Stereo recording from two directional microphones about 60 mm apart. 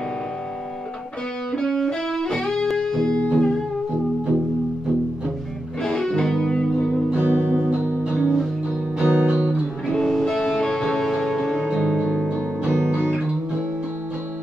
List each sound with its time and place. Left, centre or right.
1.5 s music: centre
5.9 s music: centre
7.1 s music: right
9.8 s music: centre
12.3 s music: right